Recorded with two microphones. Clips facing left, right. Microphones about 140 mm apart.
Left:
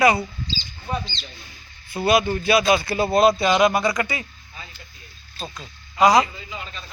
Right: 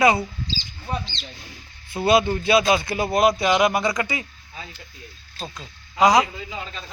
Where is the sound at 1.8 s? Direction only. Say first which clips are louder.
Right 1 dB; 25° right (ahead or behind).